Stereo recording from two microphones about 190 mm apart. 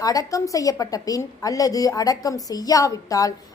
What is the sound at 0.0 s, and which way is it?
A woman's voice, 20° left (ahead or behind).